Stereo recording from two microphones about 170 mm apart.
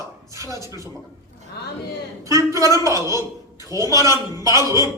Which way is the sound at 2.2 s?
20° right (ahead or behind).